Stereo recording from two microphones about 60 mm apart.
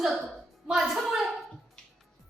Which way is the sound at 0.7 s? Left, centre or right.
Centre.